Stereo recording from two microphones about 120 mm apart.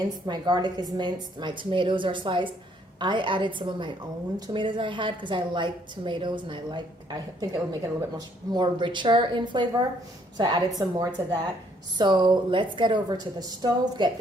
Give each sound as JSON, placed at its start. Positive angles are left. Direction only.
{"t": 0.3, "sound": "a woman's voice", "side_deg": -35}
{"t": 11.9, "sound": "a woman's voice", "side_deg": -40}